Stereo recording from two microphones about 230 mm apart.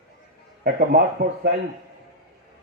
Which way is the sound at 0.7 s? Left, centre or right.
Right.